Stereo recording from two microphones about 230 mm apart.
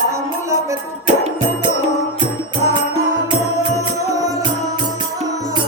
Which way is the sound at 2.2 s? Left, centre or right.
Centre.